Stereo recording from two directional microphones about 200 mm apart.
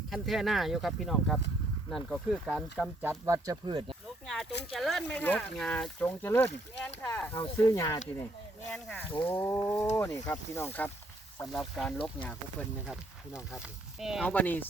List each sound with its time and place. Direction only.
0.1 s speech: centre (ahead or behind)
3.1 s speech: 15° right (ahead or behind)
4.7 s speech: centre (ahead or behind)
7.3 s speech: 25° left (ahead or behind)
8.7 s speech: 5° left (ahead or behind)
13.6 s speech: centre (ahead or behind)